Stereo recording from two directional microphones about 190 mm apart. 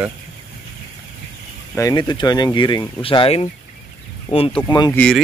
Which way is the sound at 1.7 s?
15° left (ahead or behind).